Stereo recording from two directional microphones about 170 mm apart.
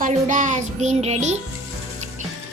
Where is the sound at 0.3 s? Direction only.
45° right (ahead or behind).